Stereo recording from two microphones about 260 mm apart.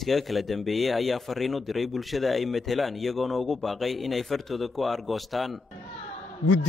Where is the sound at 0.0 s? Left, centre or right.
Centre.